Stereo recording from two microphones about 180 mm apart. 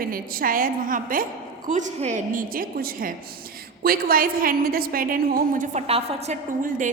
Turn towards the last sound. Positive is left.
turn(degrees=-40)  # may be behind; listen again after turning